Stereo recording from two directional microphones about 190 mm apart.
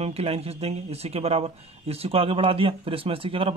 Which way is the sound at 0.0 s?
30° right (ahead or behind).